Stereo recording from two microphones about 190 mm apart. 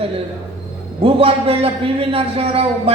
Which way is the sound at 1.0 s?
30° right (ahead or behind).